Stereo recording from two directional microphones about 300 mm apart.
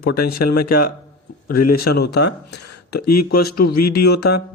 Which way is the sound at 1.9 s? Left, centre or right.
Left.